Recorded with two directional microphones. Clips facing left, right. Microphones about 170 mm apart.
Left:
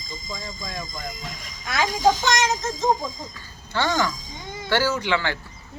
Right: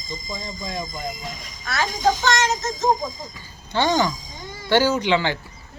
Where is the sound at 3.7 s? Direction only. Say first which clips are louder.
Right 3 dB; 20° right (ahead or behind).